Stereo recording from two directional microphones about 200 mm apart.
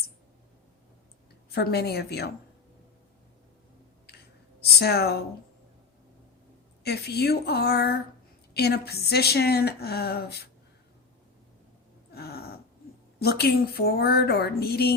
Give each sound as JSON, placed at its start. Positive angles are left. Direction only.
{"t": 1.5, "sound": "a woman's voice", "side_deg": 55}
{"t": 4.8, "sound": "a woman's voice", "side_deg": 55}
{"t": 6.8, "sound": "a woman's voice", "side_deg": 55}
{"t": 12.1, "sound": "a sound", "side_deg": 50}
{"t": 13.1, "sound": "a woman's voice", "side_deg": 55}